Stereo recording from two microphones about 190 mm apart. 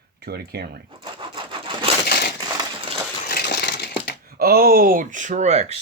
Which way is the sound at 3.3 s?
60° left (ahead or behind).